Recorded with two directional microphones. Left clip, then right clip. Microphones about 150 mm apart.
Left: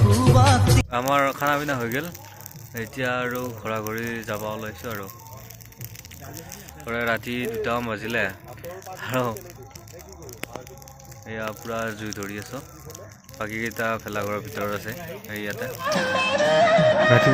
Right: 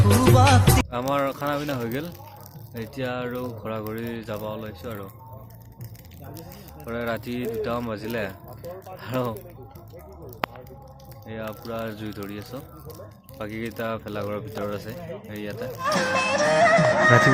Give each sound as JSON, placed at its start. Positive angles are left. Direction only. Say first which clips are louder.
{"t": 0.3, "sound": "music", "louder": "right 1 dB", "side_deg": 0}
{"t": 1.1, "sound": "speech", "louder": "left 4 dB", "side_deg": 0}
{"t": 6.8, "sound": "speech", "louder": "left 4 dB", "side_deg": 0}
{"t": 11.3, "sound": "speech", "louder": "left 3 dB", "side_deg": 0}
{"t": 15.9, "sound": "speech", "louder": "even", "side_deg": 15}
{"t": 16.6, "sound": "music", "louder": "left 1 dB", "side_deg": 30}